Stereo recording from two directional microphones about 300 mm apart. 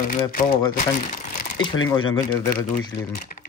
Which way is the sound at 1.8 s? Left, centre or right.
Centre.